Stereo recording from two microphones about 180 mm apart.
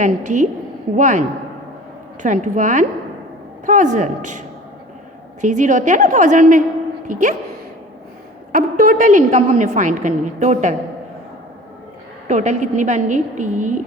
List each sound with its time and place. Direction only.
0.0 s a woman's voice: 40° right (ahead or behind)
2.2 s a woman's voice: 45° right (ahead or behind)
8.5 s a woman's voice: 50° right (ahead or behind)
12.3 s a woman's voice: 40° right (ahead or behind)